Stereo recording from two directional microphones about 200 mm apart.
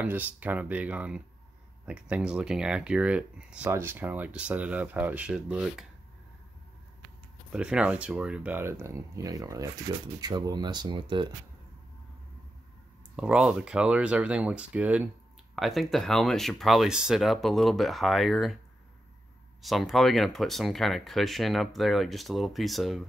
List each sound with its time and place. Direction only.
0.0 s speech: 10° right (ahead or behind)
7.5 s speech: 5° right (ahead or behind); by 11.2 s 25° right (ahead or behind)
13.1 s speech: 5° right (ahead or behind)
19.6 s speech: centre (ahead or behind)